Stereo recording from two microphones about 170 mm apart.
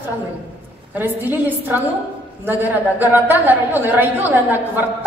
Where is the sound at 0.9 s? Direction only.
10° right (ahead or behind).